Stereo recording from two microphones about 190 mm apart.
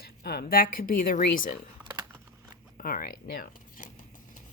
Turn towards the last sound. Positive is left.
turn(degrees=45)  # may be behind; listen again after turning